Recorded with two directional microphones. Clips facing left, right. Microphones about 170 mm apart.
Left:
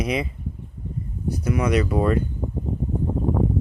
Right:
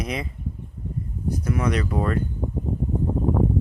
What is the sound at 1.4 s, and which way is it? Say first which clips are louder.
Speech: left 4 dB; 5° left (ahead or behind).